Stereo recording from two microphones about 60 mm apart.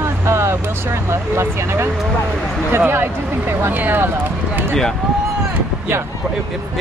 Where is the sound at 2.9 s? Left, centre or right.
Right.